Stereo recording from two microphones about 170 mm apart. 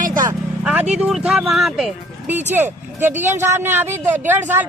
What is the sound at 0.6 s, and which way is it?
Speech, 5° right (ahead or behind).